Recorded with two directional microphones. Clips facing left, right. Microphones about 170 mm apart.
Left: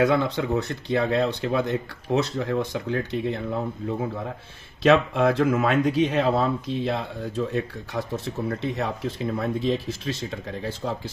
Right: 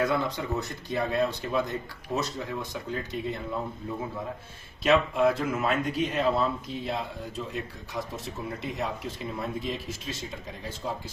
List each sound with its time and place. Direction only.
0.0 s speech: 65° left (ahead or behind)